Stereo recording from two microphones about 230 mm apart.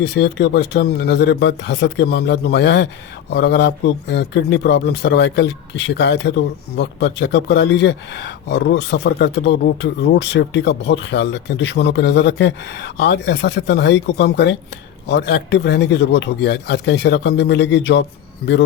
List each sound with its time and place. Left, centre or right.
0.0 s a man's voice: left